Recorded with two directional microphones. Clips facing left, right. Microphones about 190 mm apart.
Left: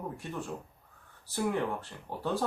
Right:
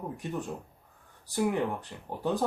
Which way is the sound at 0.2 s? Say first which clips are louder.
Right 3 dB; 15° right (ahead or behind).